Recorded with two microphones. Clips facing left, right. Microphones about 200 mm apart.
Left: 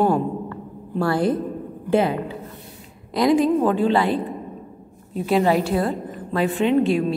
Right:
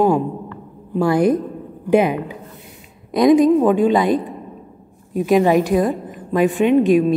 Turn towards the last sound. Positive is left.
turn(degrees=-15)  # may be behind; listen again after turning